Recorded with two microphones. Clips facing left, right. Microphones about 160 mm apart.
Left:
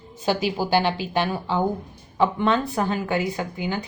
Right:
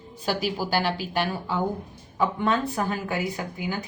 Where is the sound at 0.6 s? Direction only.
25° left (ahead or behind).